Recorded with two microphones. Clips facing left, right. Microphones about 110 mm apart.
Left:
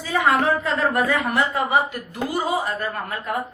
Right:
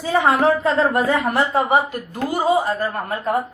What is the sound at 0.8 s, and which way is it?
Speech, 30° right (ahead or behind).